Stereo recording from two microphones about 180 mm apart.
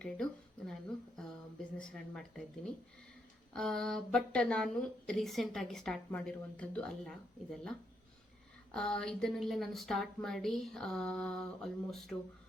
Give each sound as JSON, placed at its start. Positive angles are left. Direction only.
{"t": 0.0, "sound": "a woman's voice", "side_deg": 5}
{"t": 3.5, "sound": "a woman's voice", "side_deg": 5}